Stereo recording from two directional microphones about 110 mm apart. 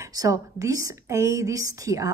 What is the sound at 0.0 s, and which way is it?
A woman's voice, 30° right (ahead or behind).